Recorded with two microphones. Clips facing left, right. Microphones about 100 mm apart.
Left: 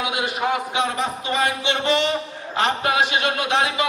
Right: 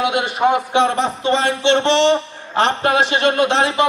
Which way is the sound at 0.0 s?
60° right (ahead or behind).